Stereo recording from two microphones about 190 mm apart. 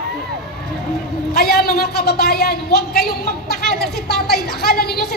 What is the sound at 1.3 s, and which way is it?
A man's voice, 55° left (ahead or behind).